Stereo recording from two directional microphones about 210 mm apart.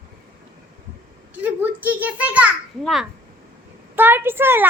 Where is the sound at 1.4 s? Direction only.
10° right (ahead or behind).